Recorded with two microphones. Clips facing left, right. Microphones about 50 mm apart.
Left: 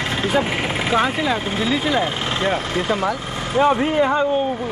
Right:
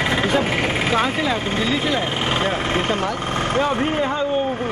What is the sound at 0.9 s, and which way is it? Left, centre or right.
Speech, centre.